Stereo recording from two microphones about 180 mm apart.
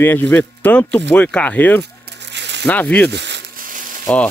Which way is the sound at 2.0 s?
70° right (ahead or behind).